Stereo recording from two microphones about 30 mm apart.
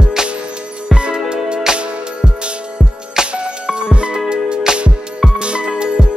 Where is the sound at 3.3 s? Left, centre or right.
Right.